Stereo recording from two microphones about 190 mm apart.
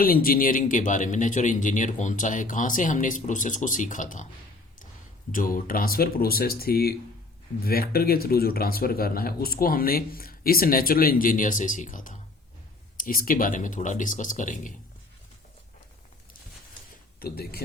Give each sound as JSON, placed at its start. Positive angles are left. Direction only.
{"t": 0.0, "sound": "speech", "side_deg": 50}
{"t": 5.3, "sound": "speech", "side_deg": 45}
{"t": 17.2, "sound": "speech", "side_deg": 55}